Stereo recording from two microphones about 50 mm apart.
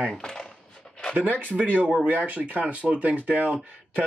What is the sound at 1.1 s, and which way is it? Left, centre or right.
Speech, right.